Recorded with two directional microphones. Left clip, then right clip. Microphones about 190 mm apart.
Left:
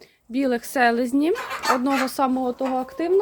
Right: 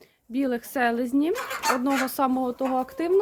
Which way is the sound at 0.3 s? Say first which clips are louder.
Left 5 dB; 10° left (ahead or behind).